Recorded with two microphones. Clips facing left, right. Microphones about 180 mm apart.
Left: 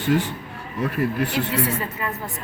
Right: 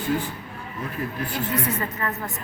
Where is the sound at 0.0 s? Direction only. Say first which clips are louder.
Left 4 dB; 80° left.